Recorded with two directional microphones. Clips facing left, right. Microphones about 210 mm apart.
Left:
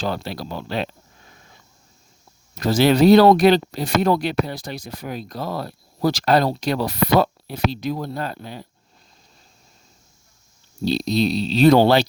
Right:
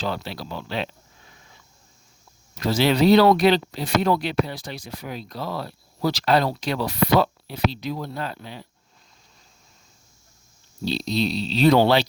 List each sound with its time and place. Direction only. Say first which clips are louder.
0.0 s speech: left 3 dB; 45° left (ahead or behind)
10.8 s speech: left 4 dB; 45° left (ahead or behind)